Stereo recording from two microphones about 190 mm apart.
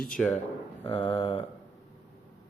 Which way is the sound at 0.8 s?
30° left (ahead or behind).